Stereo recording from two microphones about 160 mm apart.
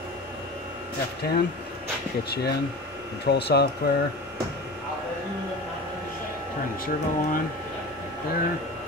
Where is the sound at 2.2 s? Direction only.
85° left.